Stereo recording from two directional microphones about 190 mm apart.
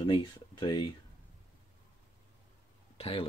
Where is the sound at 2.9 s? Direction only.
30° left (ahead or behind).